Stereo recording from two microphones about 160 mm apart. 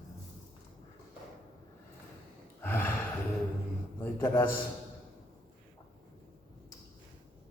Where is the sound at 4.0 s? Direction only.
15° left (ahead or behind).